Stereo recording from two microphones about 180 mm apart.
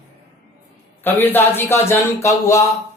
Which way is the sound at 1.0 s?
10° left (ahead or behind).